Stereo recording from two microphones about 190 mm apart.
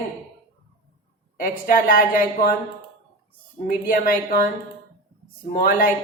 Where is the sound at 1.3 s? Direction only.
45° left (ahead or behind).